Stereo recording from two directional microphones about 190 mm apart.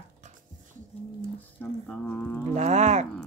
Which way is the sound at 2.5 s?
35° right (ahead or behind).